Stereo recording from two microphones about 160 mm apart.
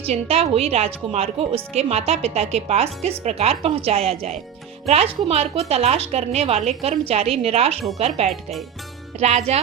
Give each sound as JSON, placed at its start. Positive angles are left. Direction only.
{"t": 0.0, "sound": "speech", "side_deg": -40}
{"t": 8.3, "sound": "speech", "side_deg": 0}
{"t": 9.1, "sound": "speech", "side_deg": -40}